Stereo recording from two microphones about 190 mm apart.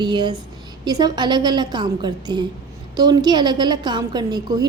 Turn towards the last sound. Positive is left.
turn(degrees=-20)  # may be behind; listen again after turning